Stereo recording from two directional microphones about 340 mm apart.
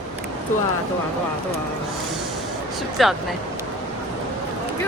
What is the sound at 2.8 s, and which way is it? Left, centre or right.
Speech, centre.